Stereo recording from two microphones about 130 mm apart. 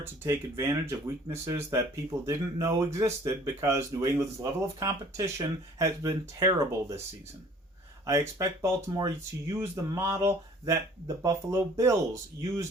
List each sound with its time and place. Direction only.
0.0 s speech: 20° right (ahead or behind)
8.4 s speech: 25° right (ahead or behind)